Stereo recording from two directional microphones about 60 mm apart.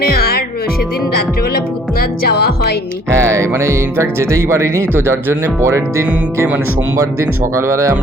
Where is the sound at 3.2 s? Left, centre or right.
Right.